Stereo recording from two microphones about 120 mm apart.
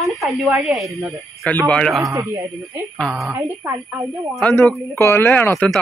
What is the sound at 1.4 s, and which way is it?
Speech, 10° left (ahead or behind).